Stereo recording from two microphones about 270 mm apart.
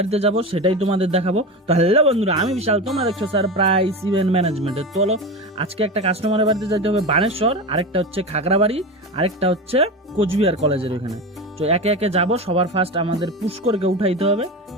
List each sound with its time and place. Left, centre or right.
0.0 s speech: right
5.5 s speech: right